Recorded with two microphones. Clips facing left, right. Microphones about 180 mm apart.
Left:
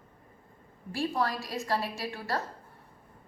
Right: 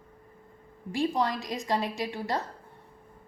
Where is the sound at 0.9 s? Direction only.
20° right (ahead or behind).